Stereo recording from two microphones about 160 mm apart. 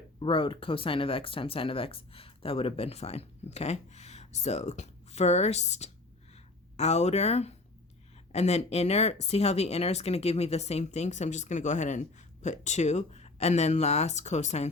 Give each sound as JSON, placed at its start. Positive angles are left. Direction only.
{"t": 0.2, "sound": "speech", "side_deg": 35}